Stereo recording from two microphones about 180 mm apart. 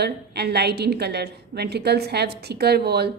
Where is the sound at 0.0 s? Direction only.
65° right (ahead or behind).